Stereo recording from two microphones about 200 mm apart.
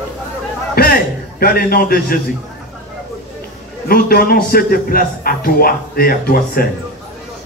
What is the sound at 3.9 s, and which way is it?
A man's voice, 50° left (ahead or behind).